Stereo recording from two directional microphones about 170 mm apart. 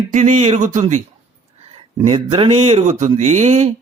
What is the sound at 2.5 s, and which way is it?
Speech, 40° right (ahead or behind).